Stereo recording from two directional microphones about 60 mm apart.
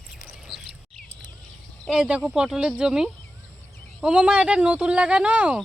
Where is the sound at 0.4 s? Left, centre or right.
Centre.